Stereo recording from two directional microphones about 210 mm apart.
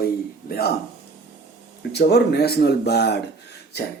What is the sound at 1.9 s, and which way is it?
Speech, 50° left (ahead or behind).